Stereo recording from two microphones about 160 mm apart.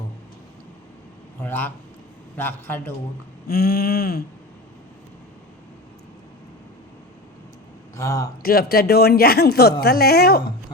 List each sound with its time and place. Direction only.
1.4 s a man's voice: 10° left (ahead or behind)
3.4 s a man's voice: 75° left (ahead or behind)
7.9 s a man's voice: 20° left (ahead or behind)
8.4 s a man's voice: 70° left (ahead or behind)